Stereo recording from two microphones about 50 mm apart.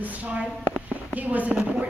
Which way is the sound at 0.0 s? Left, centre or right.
Right.